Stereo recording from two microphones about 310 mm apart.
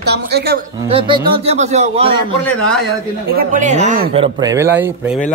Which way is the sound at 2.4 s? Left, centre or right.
Centre.